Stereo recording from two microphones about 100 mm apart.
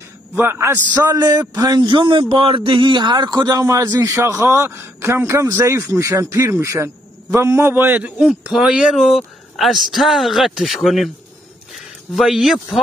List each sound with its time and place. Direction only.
0.4 s a man's voice: 25° right (ahead or behind)
0.9 s a man's voice: 40° right (ahead or behind); by 8.1 s 20° right (ahead or behind)
8.2 s speech: 5° right (ahead or behind)
12.2 s speech: 5° right (ahead or behind)